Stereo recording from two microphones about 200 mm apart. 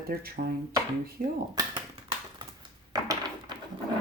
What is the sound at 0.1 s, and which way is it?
Speech, 50° right (ahead or behind).